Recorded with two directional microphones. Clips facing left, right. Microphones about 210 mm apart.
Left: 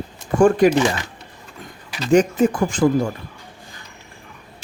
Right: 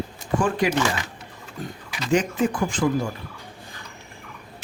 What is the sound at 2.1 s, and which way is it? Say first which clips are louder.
Speech: left 6 dB; 45° left (ahead or behind).